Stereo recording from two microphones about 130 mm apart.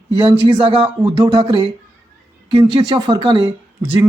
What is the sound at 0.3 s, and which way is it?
A woman's voice, 40° right (ahead or behind).